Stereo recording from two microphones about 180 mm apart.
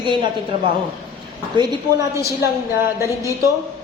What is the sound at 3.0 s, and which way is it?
Speech, 15° right (ahead or behind).